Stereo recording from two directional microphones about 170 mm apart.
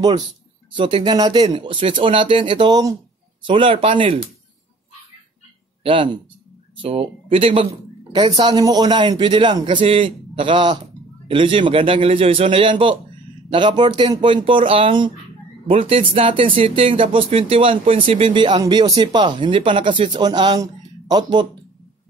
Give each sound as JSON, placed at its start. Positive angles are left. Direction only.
{"t": 0.7, "sound": "a man's voice", "side_deg": -30}
{"t": 5.9, "sound": "a man's voice", "side_deg": -30}